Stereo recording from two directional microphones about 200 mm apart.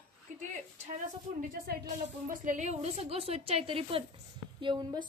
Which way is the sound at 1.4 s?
45° right (ahead or behind).